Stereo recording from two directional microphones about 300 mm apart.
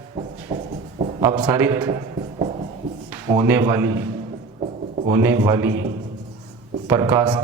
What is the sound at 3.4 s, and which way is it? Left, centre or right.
Speech, centre.